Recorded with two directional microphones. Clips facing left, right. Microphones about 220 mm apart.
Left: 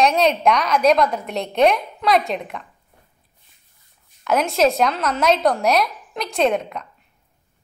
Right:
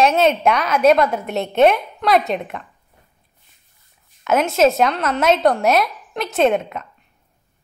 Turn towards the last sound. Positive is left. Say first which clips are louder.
# right 3 dB
turn(degrees=0)  # may be behind; listen again after turning